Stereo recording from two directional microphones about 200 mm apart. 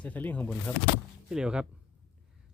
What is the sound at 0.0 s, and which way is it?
Speech, 10° left (ahead or behind).